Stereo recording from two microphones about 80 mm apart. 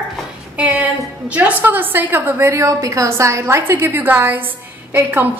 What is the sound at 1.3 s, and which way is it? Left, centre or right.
A woman's voice, centre.